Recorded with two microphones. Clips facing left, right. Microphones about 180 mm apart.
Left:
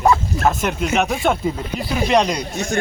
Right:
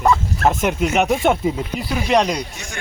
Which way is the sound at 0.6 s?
10° right (ahead or behind).